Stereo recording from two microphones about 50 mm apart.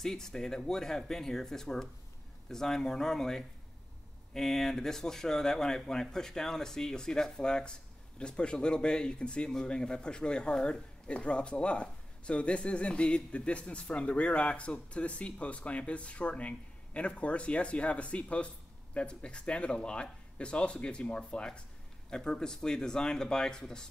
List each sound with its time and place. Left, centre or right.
0.0 s speech: centre